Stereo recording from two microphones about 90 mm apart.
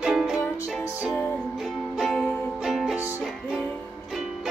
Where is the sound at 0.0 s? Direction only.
5° right (ahead or behind).